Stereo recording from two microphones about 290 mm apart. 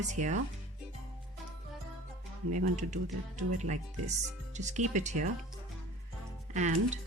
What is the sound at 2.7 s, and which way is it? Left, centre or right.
Speech, right.